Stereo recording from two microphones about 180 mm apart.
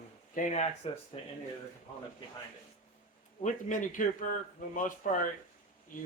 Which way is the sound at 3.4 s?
45° left (ahead or behind).